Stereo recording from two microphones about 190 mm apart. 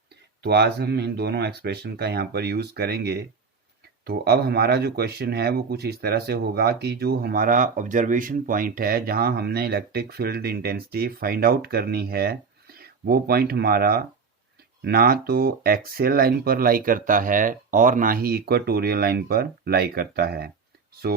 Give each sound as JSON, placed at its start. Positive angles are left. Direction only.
{"t": 0.4, "sound": "speech", "side_deg": -60}